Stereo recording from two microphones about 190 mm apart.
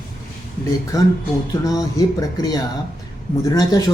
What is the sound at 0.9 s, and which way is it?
Speech, 15° left (ahead or behind).